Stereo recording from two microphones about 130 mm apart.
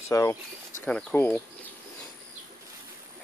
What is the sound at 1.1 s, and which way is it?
Speech, 15° left (ahead or behind).